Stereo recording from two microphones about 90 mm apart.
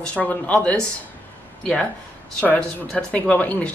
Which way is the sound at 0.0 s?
15° left (ahead or behind).